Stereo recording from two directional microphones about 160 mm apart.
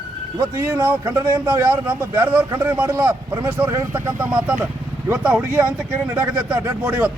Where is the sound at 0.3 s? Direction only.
15° right (ahead or behind).